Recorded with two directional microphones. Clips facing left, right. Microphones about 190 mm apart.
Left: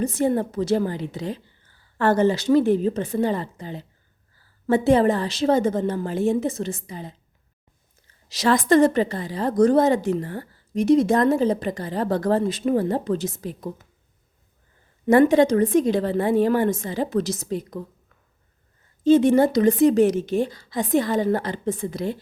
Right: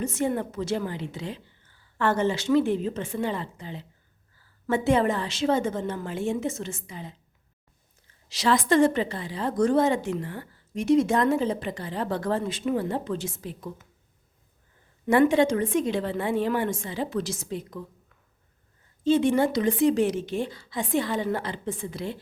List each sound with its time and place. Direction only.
0.0 s a woman's voice: 35° left (ahead or behind)
8.3 s a woman's voice: 45° left (ahead or behind)
15.0 s a woman's voice: 40° left (ahead or behind)
19.0 s a woman's voice: 40° left (ahead or behind)